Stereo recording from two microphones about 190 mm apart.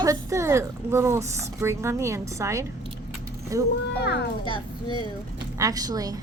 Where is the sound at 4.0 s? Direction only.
60° left (ahead or behind).